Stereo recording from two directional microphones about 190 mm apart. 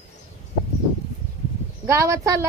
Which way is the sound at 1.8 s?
15° right (ahead or behind).